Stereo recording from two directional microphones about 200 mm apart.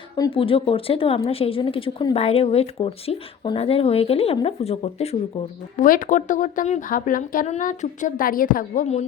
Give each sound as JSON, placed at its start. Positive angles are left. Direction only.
{"t": 0.2, "sound": "a woman's voice", "side_deg": 25}